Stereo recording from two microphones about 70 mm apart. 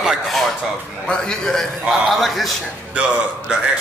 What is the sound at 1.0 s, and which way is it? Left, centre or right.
A man's voice, centre.